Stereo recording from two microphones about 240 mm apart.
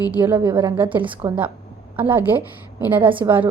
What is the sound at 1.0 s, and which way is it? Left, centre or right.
Speech, right.